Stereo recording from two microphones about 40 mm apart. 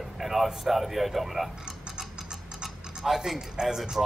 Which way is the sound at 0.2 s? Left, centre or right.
Centre.